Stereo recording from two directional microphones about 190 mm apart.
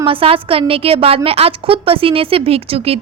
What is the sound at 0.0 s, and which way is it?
A woman's voice, 30° right (ahead or behind).